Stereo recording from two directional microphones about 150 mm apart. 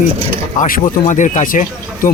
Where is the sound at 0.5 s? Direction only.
65° left (ahead or behind).